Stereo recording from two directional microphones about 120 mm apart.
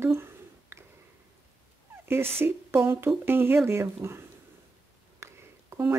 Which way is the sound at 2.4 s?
20° right (ahead or behind).